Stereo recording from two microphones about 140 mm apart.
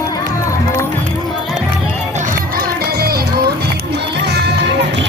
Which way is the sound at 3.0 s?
90° right.